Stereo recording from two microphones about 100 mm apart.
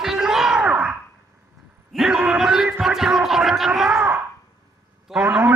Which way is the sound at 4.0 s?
25° right (ahead or behind).